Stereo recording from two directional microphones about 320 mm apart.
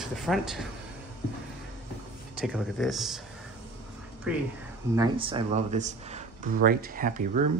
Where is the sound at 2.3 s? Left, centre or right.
Centre.